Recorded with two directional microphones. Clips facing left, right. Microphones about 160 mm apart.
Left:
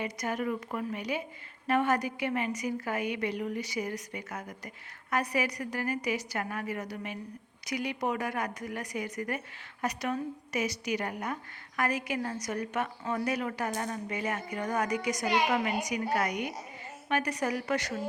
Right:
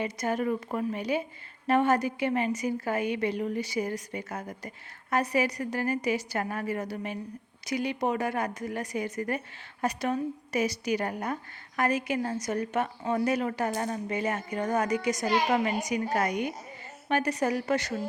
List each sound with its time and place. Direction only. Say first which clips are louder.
0.0 s a woman's voice: right 4 dB; 30° right (ahead or behind)
11.8 s a woman's voice: right 4 dB; 25° right (ahead or behind)